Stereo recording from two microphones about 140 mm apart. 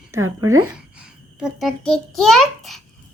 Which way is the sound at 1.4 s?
5° right (ahead or behind).